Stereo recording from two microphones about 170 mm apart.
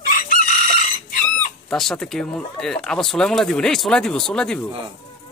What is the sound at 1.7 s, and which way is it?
Speech, centre (ahead or behind).